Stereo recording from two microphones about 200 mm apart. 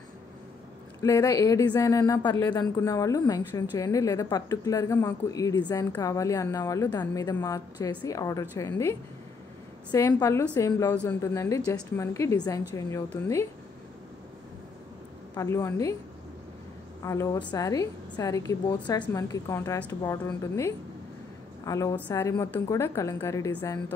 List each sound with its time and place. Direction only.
1.0 s a woman's voice: 15° left (ahead or behind)
15.3 s a woman's voice: 15° left (ahead or behind)
17.0 s a woman's voice: 15° left (ahead or behind)